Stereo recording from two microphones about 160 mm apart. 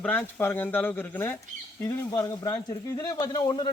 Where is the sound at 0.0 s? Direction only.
10° left (ahead or behind).